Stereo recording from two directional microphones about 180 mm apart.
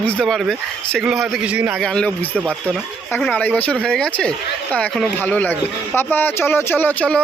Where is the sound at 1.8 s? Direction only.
5° left (ahead or behind).